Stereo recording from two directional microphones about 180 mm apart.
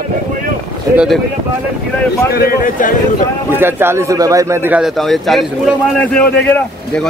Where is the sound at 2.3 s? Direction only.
55° left (ahead or behind).